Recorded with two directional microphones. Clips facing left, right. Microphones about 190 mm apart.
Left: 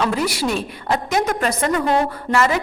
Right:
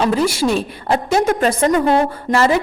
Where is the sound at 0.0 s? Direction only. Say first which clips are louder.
Right 4 dB; 30° right (ahead or behind).